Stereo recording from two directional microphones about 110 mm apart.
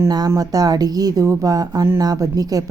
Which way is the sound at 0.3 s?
35° right (ahead or behind).